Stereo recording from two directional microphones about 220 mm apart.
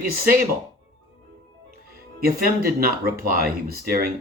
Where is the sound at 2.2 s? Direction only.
40° right (ahead or behind).